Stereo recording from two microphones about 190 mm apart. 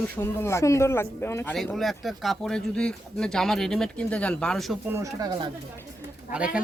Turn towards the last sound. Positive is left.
turn(degrees=-5)  # may be behind; listen again after turning